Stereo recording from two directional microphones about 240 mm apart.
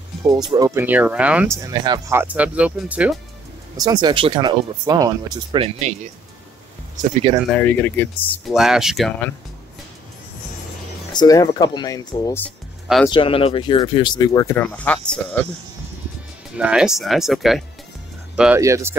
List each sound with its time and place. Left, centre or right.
0.3 s speech: centre
3.8 s speech: centre
7.5 s speech: centre
11.1 s speech: centre
12.4 s music: centre
13.0 s speech: left; by 15.0 s centre
16.5 s speech: centre